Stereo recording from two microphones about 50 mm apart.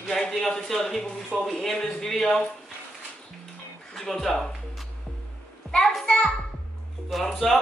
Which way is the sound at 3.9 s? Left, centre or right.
Centre.